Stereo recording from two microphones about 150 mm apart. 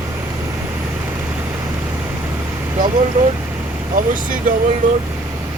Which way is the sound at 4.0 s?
65° right (ahead or behind).